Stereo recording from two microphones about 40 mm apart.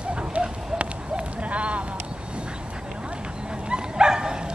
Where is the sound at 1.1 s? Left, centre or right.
Right.